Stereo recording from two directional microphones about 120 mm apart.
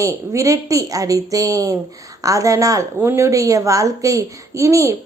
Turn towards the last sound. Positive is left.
turn(degrees=-25)  # may be behind; listen again after turning